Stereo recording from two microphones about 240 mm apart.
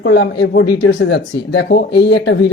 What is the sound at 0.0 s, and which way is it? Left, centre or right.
Speech, left.